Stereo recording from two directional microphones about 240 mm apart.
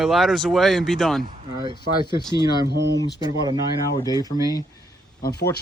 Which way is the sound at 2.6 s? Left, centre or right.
Right.